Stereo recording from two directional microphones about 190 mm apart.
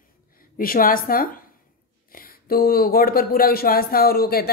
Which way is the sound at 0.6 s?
50° left (ahead or behind).